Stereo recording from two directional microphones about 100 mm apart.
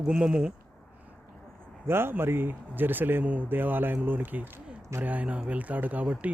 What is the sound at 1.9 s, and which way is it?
Speech, 25° right (ahead or behind).